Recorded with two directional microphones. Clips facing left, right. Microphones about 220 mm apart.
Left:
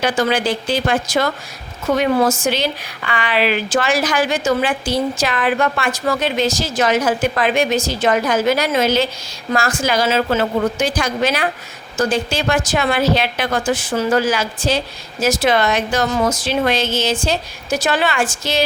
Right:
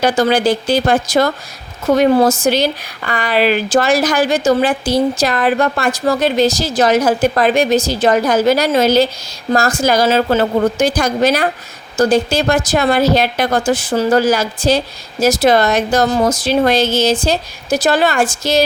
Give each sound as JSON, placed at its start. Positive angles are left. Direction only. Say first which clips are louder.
{"t": 0.0, "sound": "speech", "louder": "right 4 dB", "side_deg": -40}